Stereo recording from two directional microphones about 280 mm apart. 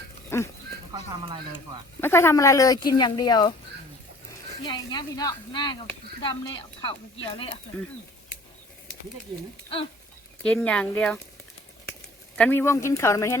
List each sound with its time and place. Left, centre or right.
0.3 s livestock: centre
0.9 s speech: centre
2.0 s speech: centre
4.6 s speech: centre
10.4 s speech: centre
12.4 s speech: centre